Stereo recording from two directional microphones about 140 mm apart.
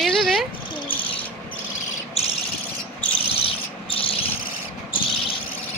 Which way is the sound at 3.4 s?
40° left (ahead or behind).